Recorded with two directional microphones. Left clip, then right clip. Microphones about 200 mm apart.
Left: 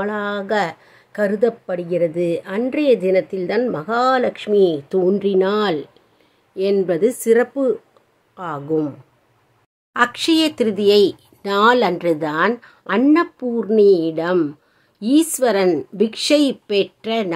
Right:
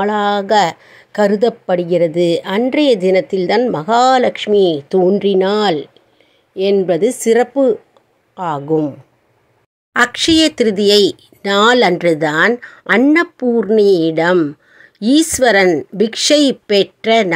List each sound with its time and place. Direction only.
0.0 s speech: 20° right (ahead or behind)
9.9 s speech: 20° right (ahead or behind)